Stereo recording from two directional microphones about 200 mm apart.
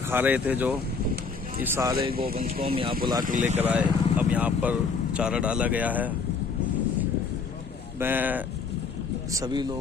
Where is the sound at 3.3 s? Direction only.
40° right (ahead or behind).